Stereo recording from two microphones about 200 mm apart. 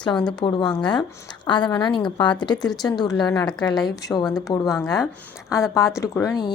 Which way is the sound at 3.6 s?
20° left (ahead or behind).